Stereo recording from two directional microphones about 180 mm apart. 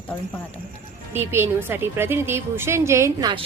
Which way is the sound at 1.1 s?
15° right (ahead or behind).